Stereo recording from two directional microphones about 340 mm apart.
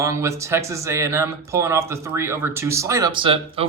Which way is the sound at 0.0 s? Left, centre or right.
Centre.